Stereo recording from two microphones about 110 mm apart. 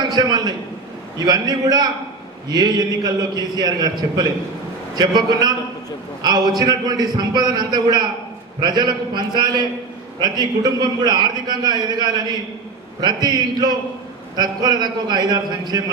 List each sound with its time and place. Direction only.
0.0 s a man's voice: 40° right (ahead or behind)